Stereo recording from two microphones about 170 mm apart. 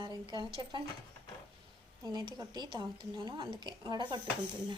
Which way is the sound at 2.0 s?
25° right (ahead or behind).